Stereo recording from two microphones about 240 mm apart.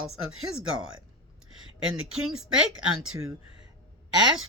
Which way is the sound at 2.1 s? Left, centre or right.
Centre.